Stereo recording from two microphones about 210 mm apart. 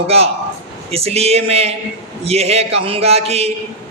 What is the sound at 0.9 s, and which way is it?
Speech, 30° right (ahead or behind).